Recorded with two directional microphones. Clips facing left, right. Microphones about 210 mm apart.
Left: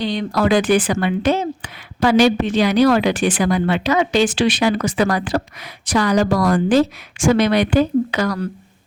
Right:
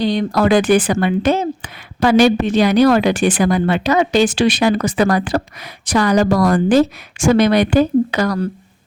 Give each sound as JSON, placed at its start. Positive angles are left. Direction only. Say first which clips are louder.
{"t": 0.0, "sound": "speech", "louder": "right 3 dB", "side_deg": -40}